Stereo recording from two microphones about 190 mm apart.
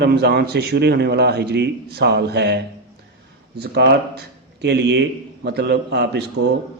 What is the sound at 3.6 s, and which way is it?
A man's voice, 60° right (ahead or behind).